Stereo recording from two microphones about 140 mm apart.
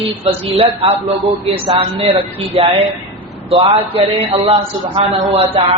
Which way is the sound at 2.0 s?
35° right (ahead or behind).